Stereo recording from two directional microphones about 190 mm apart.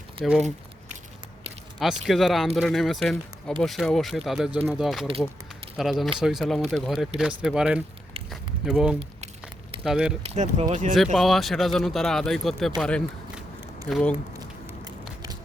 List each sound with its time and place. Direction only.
0.2 s speech: 30° right (ahead or behind)
2.0 s speech: centre (ahead or behind)
10.3 s speech: 40° right (ahead or behind)
10.9 s speech: centre (ahead or behind)
14.3 s a sound: 20° right (ahead or behind)